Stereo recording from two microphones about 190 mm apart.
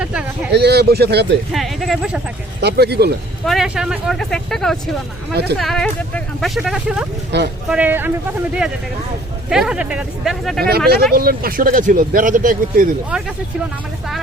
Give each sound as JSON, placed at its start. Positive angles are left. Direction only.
{"t": 0.0, "sound": "a sound", "side_deg": -5}
{"t": 0.5, "sound": "a man's voice", "side_deg": -55}
{"t": 1.5, "sound": "speech", "side_deg": 0}
{"t": 2.6, "sound": "a man's voice", "side_deg": -60}
{"t": 3.4, "sound": "speech", "side_deg": 0}
{"t": 5.3, "sound": "a man's voice", "side_deg": -60}
{"t": 5.5, "sound": "speech", "side_deg": 0}
{"t": 7.3, "sound": "a man's voice", "side_deg": -65}
{"t": 7.7, "sound": "speech", "side_deg": -10}
{"t": 9.5, "sound": "speech", "side_deg": -5}
{"t": 10.6, "sound": "a man's voice", "side_deg": -55}